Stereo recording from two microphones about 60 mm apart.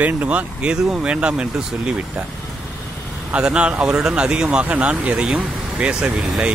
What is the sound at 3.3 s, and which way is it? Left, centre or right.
Speech, centre.